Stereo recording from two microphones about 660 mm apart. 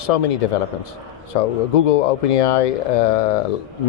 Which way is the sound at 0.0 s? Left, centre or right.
Left.